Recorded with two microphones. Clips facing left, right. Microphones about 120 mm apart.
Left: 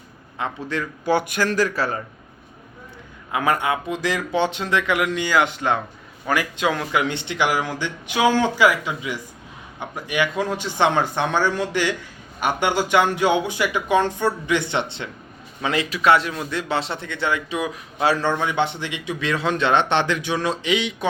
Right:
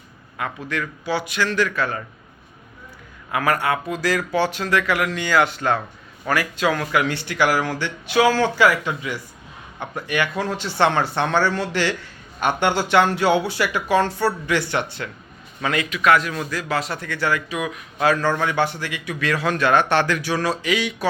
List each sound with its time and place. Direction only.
0.3 s a man's voice: 30° left (ahead or behind)
1.0 s speech: 50° left (ahead or behind); by 2.0 s 35° left (ahead or behind)
3.3 s a man's voice: 20° left (ahead or behind)